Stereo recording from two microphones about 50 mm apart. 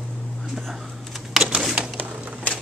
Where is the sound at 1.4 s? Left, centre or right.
Centre.